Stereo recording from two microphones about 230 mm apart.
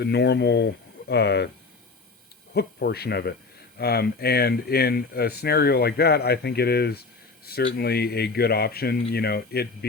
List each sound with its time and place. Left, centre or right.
0.0 s speech: left
2.5 s speech: left